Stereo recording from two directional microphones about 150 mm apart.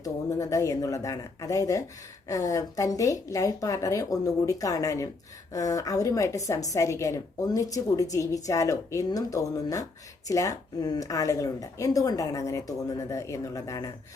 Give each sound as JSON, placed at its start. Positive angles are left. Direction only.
{"t": 0.0, "sound": "a woman's voice", "side_deg": 20}